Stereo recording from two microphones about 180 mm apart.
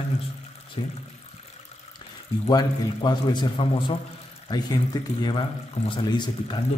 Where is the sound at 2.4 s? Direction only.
25° left (ahead or behind).